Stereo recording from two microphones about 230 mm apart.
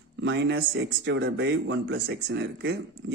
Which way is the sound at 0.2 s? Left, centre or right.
Right.